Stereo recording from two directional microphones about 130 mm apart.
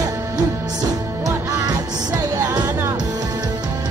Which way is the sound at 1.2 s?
25° right (ahead or behind).